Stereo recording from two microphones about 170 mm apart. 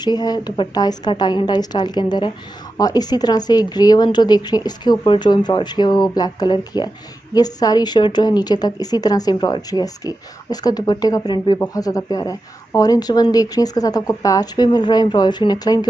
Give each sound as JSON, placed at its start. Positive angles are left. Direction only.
{"t": 0.0, "sound": "a woman's voice", "side_deg": 25}